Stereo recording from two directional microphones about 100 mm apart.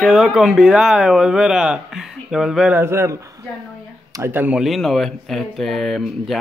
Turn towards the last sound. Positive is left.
turn(degrees=0)  # may be behind; listen again after turning